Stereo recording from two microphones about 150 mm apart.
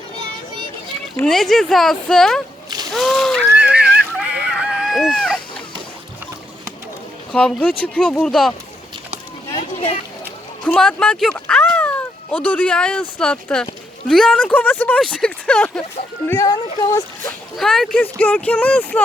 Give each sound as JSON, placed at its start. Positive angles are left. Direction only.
{"t": 1.2, "sound": "speech", "side_deg": 5}
{"t": 3.6, "sound": "a sound", "side_deg": -5}
{"t": 7.3, "sound": "speech", "side_deg": 5}
{"t": 9.6, "sound": "a sound", "side_deg": 40}
{"t": 10.6, "sound": "speech", "side_deg": 5}
{"t": 17.6, "sound": "speech", "side_deg": 5}